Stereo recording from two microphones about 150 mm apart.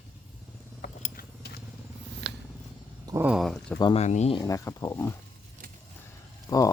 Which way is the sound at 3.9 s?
50° left (ahead or behind).